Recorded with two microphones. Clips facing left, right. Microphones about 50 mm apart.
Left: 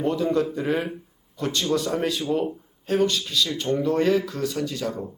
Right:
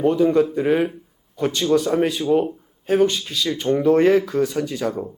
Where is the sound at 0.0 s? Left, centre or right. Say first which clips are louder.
Right 6 dB; centre.